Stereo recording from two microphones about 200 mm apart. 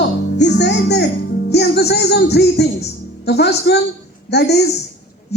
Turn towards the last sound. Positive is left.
turn(degrees=55)  # may be behind; listen again after turning